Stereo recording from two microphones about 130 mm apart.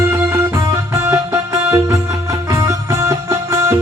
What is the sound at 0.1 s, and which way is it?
Music, 25° right (ahead or behind).